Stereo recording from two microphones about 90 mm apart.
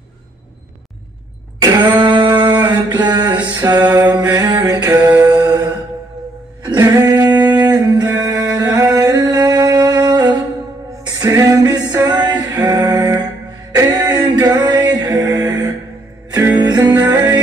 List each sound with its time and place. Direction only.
2.0 s singing: 60° right (ahead or behind)
2.7 s mantra: 50° right (ahead or behind)
5.2 s a sound: 40° right (ahead or behind)
6.7 s singing: 45° right (ahead or behind)
11.1 s music: 40° right (ahead or behind)